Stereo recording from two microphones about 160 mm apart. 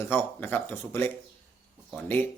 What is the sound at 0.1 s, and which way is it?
Speech, 10° left (ahead or behind).